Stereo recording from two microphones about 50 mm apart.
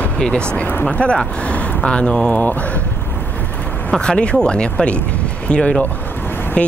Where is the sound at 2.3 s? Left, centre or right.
Left.